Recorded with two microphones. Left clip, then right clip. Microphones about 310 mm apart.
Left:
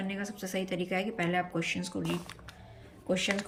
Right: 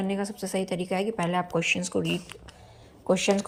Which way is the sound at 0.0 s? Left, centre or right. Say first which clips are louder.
Right 7 dB; centre.